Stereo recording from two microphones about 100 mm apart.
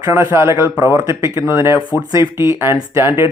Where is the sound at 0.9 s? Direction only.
35° right (ahead or behind).